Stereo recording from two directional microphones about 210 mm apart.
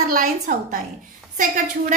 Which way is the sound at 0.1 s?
35° right (ahead or behind).